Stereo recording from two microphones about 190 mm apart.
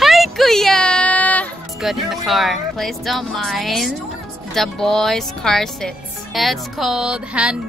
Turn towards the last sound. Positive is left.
turn(degrees=-5)  # may be behind; listen again after turning